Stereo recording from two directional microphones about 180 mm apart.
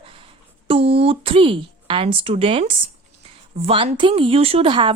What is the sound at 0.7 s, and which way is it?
Speech, 30° right (ahead or behind).